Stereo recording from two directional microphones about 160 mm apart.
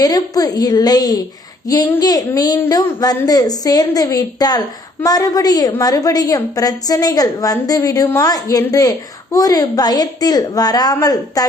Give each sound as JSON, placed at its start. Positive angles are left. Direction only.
{"t": 0.0, "sound": "a woman's voice", "side_deg": 25}